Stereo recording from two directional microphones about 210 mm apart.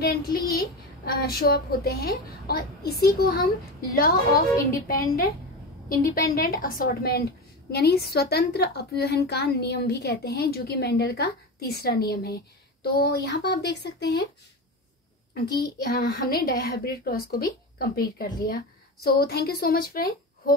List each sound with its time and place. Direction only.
0.0 s a woman's voice: 45° left (ahead or behind)
15.5 s a woman's voice: 45° left (ahead or behind)